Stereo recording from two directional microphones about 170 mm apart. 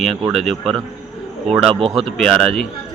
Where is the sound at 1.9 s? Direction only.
Centre (ahead or behind).